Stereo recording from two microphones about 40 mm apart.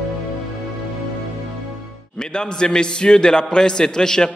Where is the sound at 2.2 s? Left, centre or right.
Centre.